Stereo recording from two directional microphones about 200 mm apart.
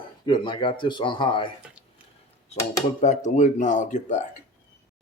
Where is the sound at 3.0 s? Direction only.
35° left (ahead or behind).